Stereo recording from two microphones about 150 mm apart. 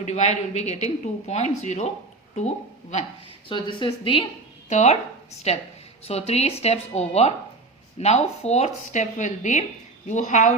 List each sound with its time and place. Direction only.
0.0 s speech: 50° left (ahead or behind)
3.5 s speech: 30° left (ahead or behind)
4.7 s speech: 50° left (ahead or behind)